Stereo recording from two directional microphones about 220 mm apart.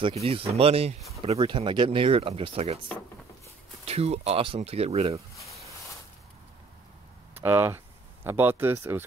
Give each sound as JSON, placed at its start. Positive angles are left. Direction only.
{"t": 0.0, "sound": "speech", "side_deg": -25}
{"t": 3.8, "sound": "speech", "side_deg": -30}
{"t": 7.3, "sound": "speech", "side_deg": -10}